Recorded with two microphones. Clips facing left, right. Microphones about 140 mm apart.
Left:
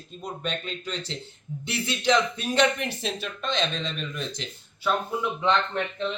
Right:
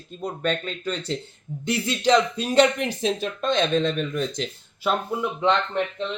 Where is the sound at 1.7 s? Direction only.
35° right (ahead or behind).